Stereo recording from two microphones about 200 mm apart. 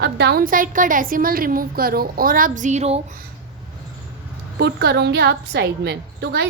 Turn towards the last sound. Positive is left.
turn(degrees=-55)  # may be behind; listen again after turning